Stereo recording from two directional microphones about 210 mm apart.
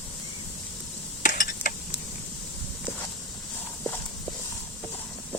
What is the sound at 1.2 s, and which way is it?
Mechanisms, 40° left (ahead or behind).